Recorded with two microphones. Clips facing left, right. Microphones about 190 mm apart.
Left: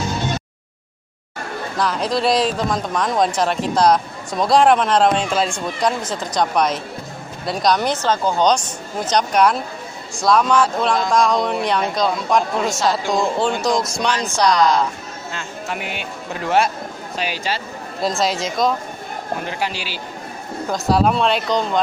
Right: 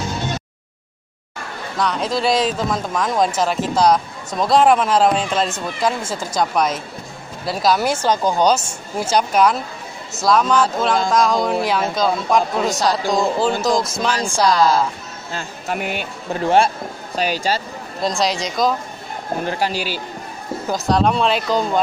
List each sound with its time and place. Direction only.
1.8 s speech: centre (ahead or behind)
9.1 s speech: centre (ahead or behind)
15.3 s speech: 45° right (ahead or behind)
16.4 s speech: 30° right (ahead or behind)
17.2 s speech: 40° right (ahead or behind)
18.0 s speech: centre (ahead or behind)
19.6 s speech: 45° right (ahead or behind)
20.6 s speech: centre (ahead or behind)